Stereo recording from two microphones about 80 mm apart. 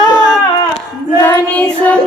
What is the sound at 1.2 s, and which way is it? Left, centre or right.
Child singing, centre.